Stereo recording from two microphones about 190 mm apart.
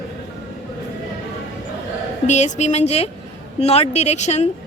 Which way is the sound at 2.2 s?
35° left (ahead or behind).